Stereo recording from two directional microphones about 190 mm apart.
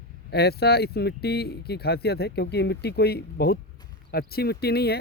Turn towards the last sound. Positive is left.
turn(degrees=55)  # may be behind; listen again after turning